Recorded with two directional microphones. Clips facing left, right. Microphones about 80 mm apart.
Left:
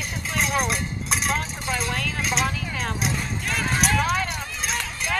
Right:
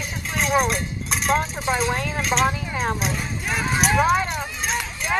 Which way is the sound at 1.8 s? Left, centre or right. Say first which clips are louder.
Right 4 dB; right.